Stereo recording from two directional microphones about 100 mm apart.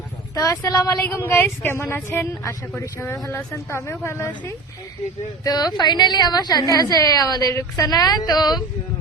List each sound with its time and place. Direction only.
0.3 s a woman's voice: 35° left (ahead or behind)
5.5 s a woman's voice: 40° left (ahead or behind)